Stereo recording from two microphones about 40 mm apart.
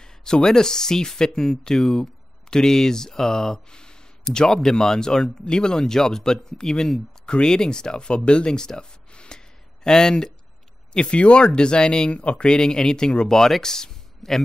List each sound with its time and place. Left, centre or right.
0.0 s speech: centre
9.1 s gasp: left
9.8 s speech: centre
12.4 s speech: centre